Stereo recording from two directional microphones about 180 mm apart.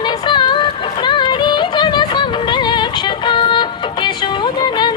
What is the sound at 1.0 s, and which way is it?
Music, 25° left (ahead or behind).